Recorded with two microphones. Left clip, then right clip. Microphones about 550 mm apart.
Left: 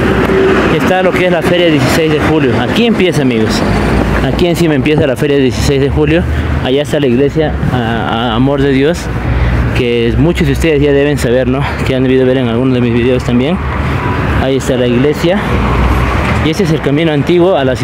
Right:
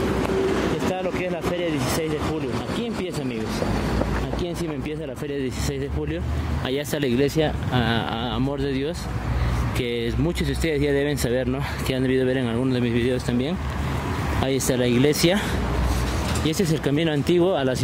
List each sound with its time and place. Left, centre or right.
0.8 s speech: right
4.4 s speech: right
16.4 s speech: right